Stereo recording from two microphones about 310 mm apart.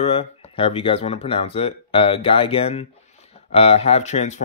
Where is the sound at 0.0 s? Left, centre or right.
Centre.